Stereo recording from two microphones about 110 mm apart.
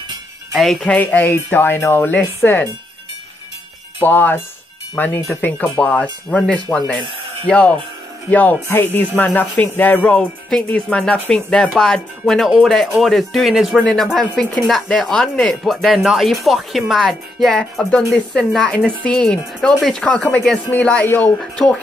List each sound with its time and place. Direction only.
0.6 s speech: centre (ahead or behind)
0.9 s speech: 15° left (ahead or behind)
4.0 s music: 15° left (ahead or behind)
12.4 s speech: centre (ahead or behind)
20.7 s music: 15° left (ahead or behind)